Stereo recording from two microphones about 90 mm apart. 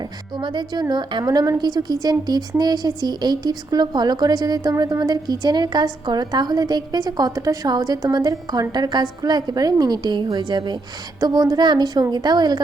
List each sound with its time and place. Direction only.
0.3 s a woman's voice: 55° right (ahead or behind)
11.2 s a woman's voice: 45° right (ahead or behind)